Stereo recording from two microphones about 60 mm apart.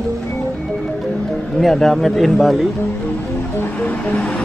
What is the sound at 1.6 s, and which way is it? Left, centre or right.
Speech, centre.